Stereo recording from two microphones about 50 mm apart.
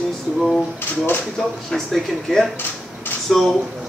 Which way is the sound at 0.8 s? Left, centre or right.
Left.